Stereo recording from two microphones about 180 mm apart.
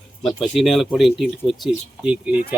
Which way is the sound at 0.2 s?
Centre (ahead or behind).